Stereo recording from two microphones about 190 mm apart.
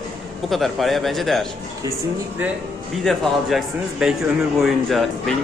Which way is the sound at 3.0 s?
Centre (ahead or behind).